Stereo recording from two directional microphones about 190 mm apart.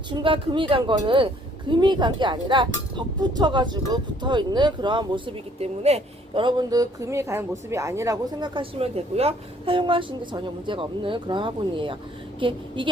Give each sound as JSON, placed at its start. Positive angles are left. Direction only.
{"t": 0.1, "sound": "speech", "side_deg": -25}